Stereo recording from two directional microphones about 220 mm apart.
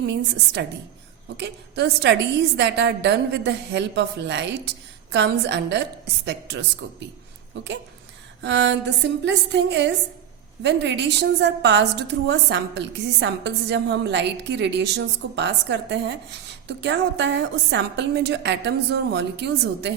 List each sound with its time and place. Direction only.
0.0 s a woman's voice: 50° right (ahead or behind)
8.4 s a sound: 55° right (ahead or behind)
9.2 s a woman's voice: 55° right (ahead or behind)